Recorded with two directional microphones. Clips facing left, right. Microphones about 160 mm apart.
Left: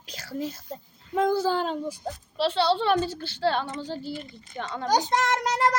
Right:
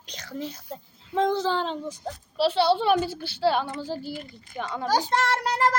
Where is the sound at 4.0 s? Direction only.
25° left (ahead or behind).